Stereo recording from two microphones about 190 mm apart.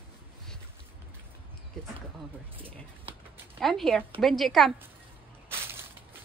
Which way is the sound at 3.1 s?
30° right (ahead or behind).